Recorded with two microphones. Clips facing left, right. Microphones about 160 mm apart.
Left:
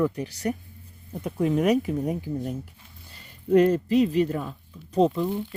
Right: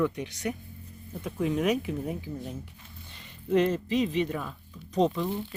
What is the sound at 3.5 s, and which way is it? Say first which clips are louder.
Speech: left 6 dB; 45° left (ahead or behind).